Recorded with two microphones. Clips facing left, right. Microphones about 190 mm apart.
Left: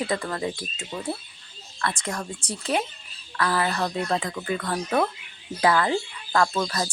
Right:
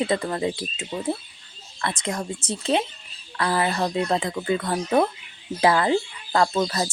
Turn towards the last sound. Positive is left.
turn(degrees=-25)  # may be behind; listen again after turning